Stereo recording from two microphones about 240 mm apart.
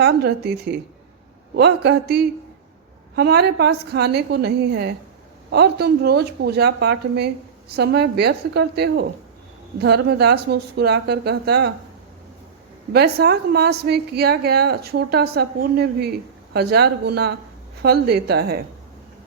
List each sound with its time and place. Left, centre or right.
0.0 s speech: right
12.9 s a woman's voice: right